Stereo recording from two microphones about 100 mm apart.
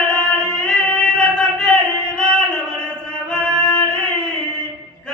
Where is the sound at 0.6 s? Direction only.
10° left (ahead or behind).